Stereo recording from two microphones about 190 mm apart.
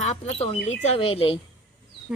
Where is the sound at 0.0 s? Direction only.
35° left (ahead or behind).